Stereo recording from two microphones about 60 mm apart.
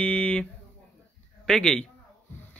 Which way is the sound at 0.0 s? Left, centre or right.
Centre.